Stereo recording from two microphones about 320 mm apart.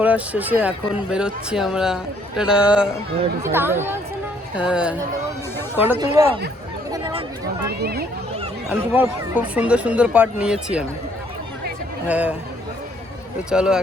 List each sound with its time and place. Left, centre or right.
0.0 s speech: centre
6.9 s a sound: centre
7.7 s speech: right
8.7 s speech: centre
12.0 s speech: centre
13.5 s speech: centre